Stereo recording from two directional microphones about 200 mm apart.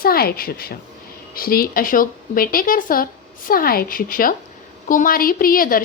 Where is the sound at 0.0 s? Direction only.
50° left (ahead or behind).